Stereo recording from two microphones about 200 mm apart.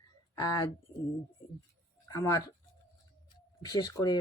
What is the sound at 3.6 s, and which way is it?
Speech, 20° left (ahead or behind).